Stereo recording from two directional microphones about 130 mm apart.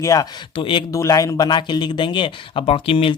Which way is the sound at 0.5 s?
40° left (ahead or behind).